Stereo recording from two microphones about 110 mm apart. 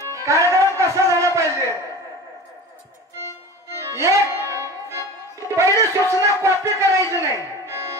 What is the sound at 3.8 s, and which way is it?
Music, 25° right (ahead or behind).